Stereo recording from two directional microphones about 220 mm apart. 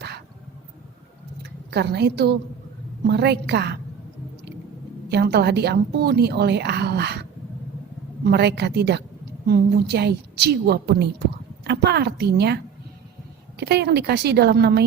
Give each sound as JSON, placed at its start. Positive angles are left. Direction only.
{"t": 1.4, "sound": "a sound", "side_deg": -50}
{"t": 3.0, "sound": "a woman's voice", "side_deg": -50}
{"t": 5.0, "sound": "a woman's voice", "side_deg": -50}
{"t": 13.6, "sound": "a woman's voice", "side_deg": -50}